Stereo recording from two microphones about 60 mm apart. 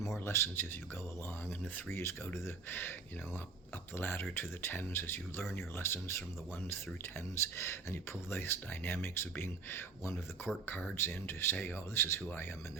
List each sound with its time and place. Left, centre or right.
0.3 s speech: left
3.9 s speech: left
7.4 s speech: left